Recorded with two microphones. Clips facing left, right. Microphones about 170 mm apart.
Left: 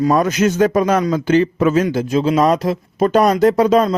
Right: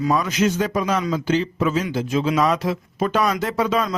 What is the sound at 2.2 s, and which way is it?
Speech, 35° left (ahead or behind).